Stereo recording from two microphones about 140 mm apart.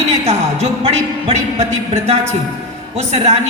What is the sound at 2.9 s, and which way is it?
Speech, 45° right (ahead or behind).